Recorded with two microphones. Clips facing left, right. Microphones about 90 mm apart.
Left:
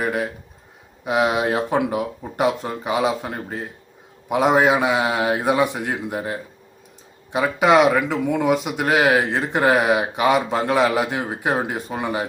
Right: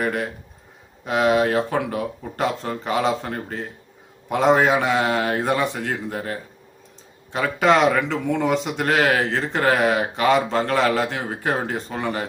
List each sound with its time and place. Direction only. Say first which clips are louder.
0.0 s a man's voice: left 1 dB; 5° left (ahead or behind)